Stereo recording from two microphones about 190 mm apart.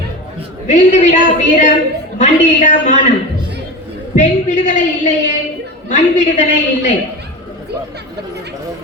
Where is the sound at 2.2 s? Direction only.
40° left (ahead or behind).